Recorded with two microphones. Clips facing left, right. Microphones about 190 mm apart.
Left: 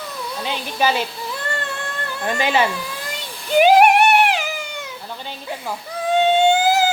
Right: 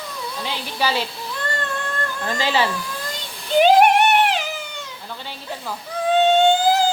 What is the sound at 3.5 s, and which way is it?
Music, 10° left (ahead or behind).